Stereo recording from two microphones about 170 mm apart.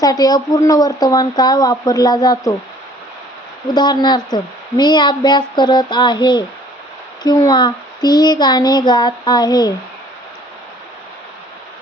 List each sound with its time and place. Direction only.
0.0 s speech: 20° left (ahead or behind)
3.8 s speech: 25° left (ahead or behind)